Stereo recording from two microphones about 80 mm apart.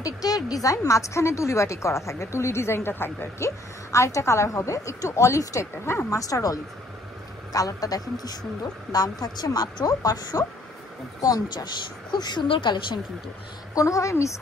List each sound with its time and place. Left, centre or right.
0.0 s speech: left
6.1 s a man's voice: left
13.7 s speech: left